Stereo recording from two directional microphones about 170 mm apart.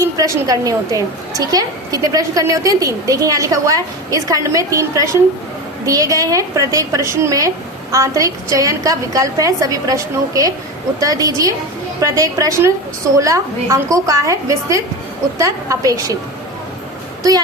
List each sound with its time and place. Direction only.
0.0 s a woman's voice: 20° right (ahead or behind)